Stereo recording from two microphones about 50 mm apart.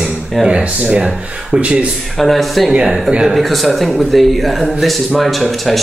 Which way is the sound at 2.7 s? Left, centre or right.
Centre.